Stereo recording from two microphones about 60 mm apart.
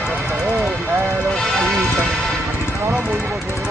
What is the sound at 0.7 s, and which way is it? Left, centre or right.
Vehicle, right.